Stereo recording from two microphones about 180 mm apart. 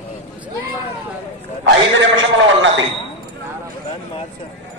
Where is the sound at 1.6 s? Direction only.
90° right.